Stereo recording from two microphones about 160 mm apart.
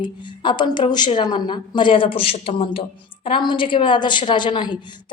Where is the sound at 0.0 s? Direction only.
30° left (ahead or behind).